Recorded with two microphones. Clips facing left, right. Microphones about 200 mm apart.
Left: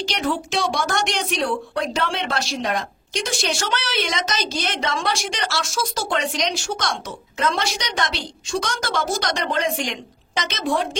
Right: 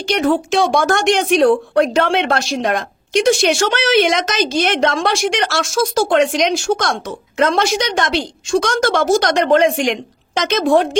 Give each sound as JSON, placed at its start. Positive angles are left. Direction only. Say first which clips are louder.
{"t": 0.0, "sound": "a woman's voice", "louder": "right 8 dB", "side_deg": -55}
{"t": 2.0, "sound": "speech", "louder": "right 10 dB", "side_deg": -70}
{"t": 2.3, "sound": "a woman's voice", "louder": "right 6 dB", "side_deg": -50}
{"t": 3.2, "sound": "a woman's voice", "louder": "right 12 dB", "side_deg": -65}
{"t": 5.2, "sound": "speech", "louder": "right 10 dB", "side_deg": -75}
{"t": 5.5, "sound": "a woman's voice", "louder": "right 8 dB", "side_deg": -50}
{"t": 8.9, "sound": "speech", "louder": "right 9 dB", "side_deg": -80}
{"t": 9.2, "sound": "a woman's voice", "louder": "right 10 dB", "side_deg": -55}
{"t": 10.5, "sound": "a woman's voice", "louder": "right 10 dB", "side_deg": -55}